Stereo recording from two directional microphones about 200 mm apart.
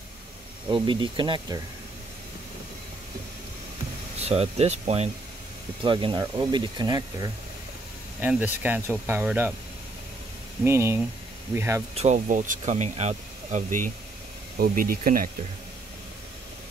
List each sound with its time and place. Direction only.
0.7 s speech: 25° right (ahead or behind)
4.2 s speech: 30° right (ahead or behind)
8.2 s speech: 10° right (ahead or behind)
10.6 s speech: 15° right (ahead or behind)
11.9 s speech: 35° right (ahead or behind)